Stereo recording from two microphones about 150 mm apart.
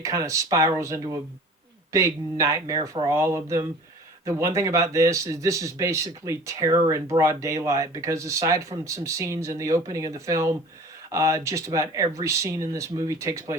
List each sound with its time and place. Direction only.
0.0 s speech: 20° right (ahead or behind)